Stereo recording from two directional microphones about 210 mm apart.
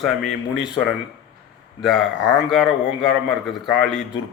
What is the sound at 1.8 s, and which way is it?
A man's voice, centre (ahead or behind).